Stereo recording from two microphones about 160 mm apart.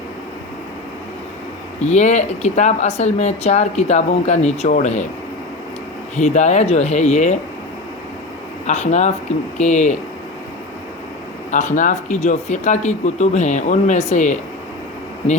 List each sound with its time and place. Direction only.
1.8 s speech: 45° left (ahead or behind)
6.1 s speech: 45° left (ahead or behind)
8.6 s speech: 45° left (ahead or behind)
11.5 s speech: 50° left (ahead or behind)